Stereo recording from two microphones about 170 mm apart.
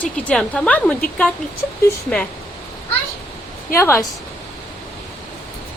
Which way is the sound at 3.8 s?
15° left (ahead or behind).